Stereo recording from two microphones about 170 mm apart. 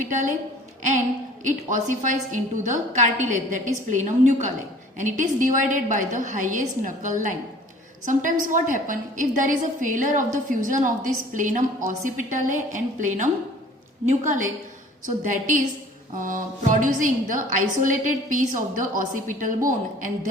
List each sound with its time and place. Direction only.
0.0 s a woman's voice: 50° right (ahead or behind)
1.5 s a woman's voice: 50° right (ahead or behind)
15.0 s a woman's voice: 50° right (ahead or behind)